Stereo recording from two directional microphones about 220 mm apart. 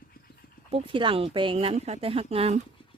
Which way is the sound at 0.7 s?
25° right (ahead or behind).